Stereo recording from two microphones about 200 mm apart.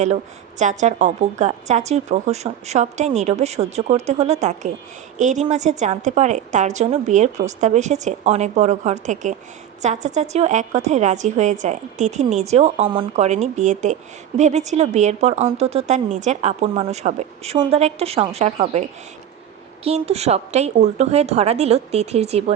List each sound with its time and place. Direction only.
0.6 s a woman's voice: 35° right (ahead or behind)